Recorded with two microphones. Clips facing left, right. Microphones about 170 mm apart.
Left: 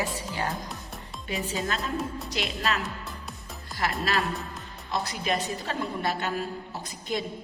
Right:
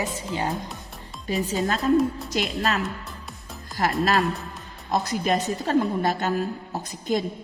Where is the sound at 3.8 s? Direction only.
45° right (ahead or behind).